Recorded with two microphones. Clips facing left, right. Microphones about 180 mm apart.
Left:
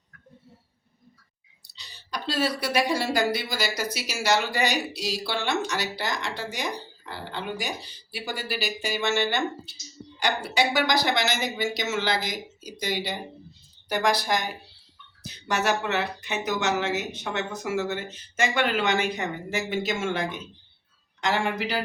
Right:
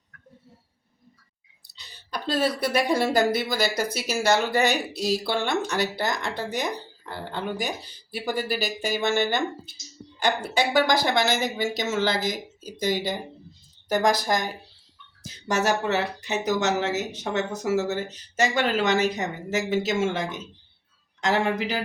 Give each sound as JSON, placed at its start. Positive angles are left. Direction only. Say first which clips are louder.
{"t": 1.7, "sound": "a woman's voice", "louder": "right 1 dB", "side_deg": -50}